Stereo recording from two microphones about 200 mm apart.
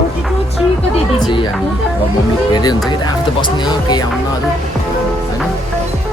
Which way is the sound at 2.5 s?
20° left (ahead or behind).